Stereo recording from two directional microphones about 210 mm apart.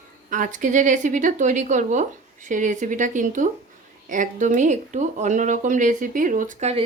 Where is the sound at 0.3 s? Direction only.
40° right (ahead or behind).